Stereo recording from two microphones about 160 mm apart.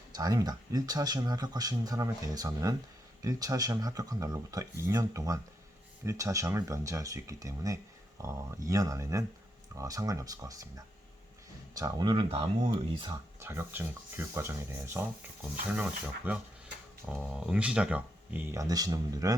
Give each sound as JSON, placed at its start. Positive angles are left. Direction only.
{"t": 0.1, "sound": "speech", "side_deg": -25}
{"t": 13.4, "sound": "speech", "side_deg": -15}
{"t": 18.5, "sound": "speech", "side_deg": -20}